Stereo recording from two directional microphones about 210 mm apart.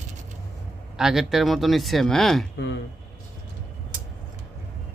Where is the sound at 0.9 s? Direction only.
Centre (ahead or behind).